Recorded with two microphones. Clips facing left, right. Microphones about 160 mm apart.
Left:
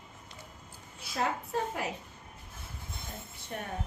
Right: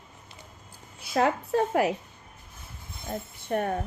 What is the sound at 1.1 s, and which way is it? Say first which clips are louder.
Speech: right 8 dB; 70° right (ahead or behind).